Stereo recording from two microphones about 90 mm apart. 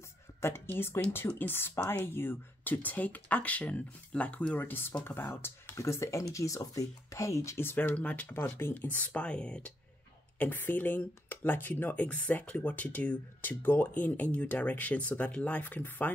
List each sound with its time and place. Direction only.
0.4 s speech: 25° left (ahead or behind)
7.7 s speech: 15° left (ahead or behind)